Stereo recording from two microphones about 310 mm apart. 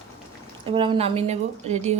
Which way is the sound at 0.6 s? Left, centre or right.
Centre.